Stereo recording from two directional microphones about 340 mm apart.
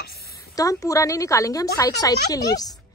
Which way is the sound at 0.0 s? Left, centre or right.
Left.